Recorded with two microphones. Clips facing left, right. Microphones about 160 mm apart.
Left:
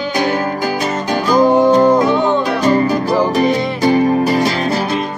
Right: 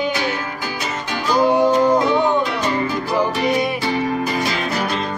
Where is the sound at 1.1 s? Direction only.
40° left (ahead or behind).